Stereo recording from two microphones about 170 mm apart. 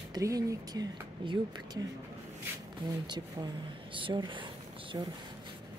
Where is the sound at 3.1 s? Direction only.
25° right (ahead or behind).